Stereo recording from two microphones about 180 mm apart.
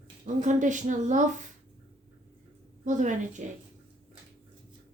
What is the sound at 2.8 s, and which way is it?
Speech, 45° right (ahead or behind).